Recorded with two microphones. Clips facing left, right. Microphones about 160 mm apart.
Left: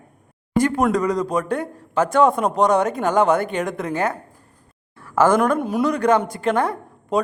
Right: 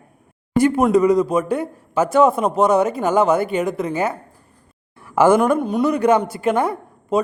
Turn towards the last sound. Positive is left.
turn(degrees=0)  # may be behind; listen again after turning